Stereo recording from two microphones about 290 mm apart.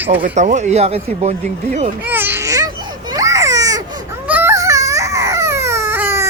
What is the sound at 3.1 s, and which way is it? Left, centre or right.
Baby cry, centre.